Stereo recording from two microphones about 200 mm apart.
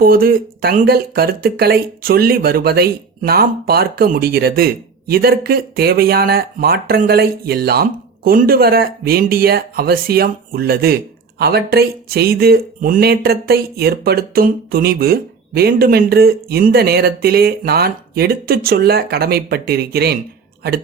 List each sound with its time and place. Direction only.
0.0 s speech: 45° right (ahead or behind)